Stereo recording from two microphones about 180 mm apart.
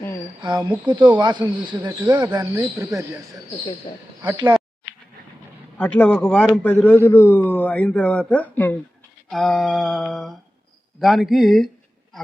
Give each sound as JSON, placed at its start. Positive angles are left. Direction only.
{"t": 0.4, "sound": "speech", "side_deg": -25}
{"t": 3.9, "sound": "speech", "side_deg": 30}
{"t": 5.7, "sound": "a man's voice", "side_deg": 5}
{"t": 9.3, "sound": "a sound", "side_deg": 0}